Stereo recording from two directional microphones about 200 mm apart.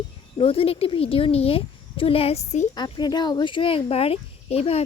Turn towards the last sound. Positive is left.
turn(degrees=30)  # may be behind; listen again after turning